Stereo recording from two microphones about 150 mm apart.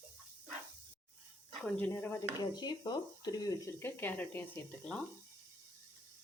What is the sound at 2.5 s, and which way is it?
Speech, 30° left (ahead or behind).